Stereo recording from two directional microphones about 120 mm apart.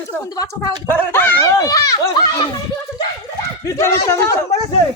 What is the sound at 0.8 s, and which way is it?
Speech, 15° left (ahead or behind).